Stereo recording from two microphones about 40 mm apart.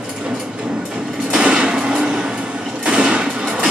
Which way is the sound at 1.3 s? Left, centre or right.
Right.